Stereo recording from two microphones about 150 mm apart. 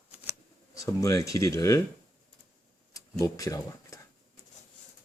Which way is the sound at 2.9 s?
25° left (ahead or behind).